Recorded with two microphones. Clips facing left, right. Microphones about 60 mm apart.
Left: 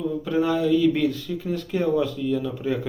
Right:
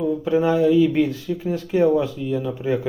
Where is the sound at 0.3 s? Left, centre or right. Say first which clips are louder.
Right 4 dB; centre.